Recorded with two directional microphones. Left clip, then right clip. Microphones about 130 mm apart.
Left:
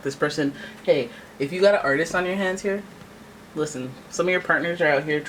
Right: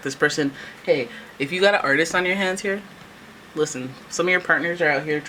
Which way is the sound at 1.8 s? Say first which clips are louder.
Right 3 dB; 35° right (ahead or behind).